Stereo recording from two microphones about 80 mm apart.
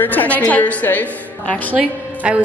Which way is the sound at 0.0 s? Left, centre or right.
Left.